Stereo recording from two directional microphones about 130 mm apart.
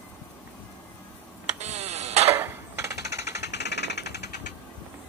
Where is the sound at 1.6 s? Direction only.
60° right (ahead or behind).